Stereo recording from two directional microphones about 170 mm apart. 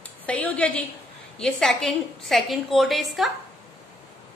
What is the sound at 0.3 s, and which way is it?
A woman's voice, 10° left (ahead or behind).